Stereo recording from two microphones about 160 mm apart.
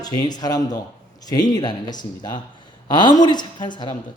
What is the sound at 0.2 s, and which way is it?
Speech, 25° left (ahead or behind).